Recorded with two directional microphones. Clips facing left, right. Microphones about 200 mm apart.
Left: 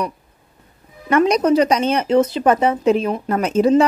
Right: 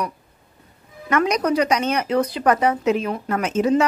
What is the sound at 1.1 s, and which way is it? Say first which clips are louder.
Speech: left 5 dB; 30° left (ahead or behind).